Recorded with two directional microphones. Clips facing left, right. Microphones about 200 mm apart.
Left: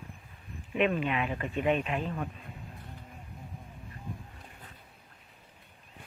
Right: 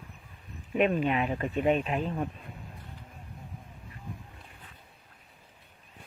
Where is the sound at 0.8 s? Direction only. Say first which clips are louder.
Right 3 dB; 40° right (ahead or behind).